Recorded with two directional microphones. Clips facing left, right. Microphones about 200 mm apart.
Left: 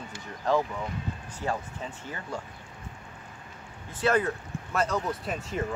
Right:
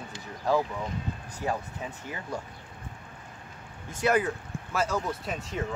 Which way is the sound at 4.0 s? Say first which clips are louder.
Even; 15° right (ahead or behind).